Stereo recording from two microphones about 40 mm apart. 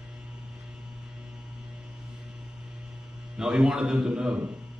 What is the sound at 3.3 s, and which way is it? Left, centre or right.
A man's voice, centre.